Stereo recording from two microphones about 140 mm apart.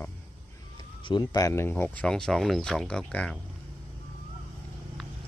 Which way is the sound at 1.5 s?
15° left (ahead or behind).